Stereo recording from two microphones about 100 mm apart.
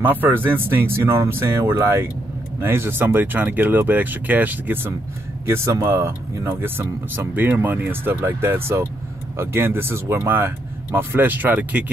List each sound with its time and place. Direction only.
0.0 s speech: 20° right (ahead or behind)